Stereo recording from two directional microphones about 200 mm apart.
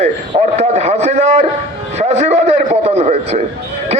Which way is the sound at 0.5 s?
35° right (ahead or behind).